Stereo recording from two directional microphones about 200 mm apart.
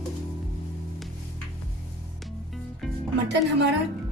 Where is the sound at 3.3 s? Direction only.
60° right (ahead or behind).